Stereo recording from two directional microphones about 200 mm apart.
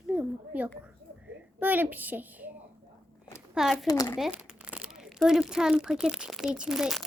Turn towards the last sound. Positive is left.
turn(degrees=0)  # may be behind; listen again after turning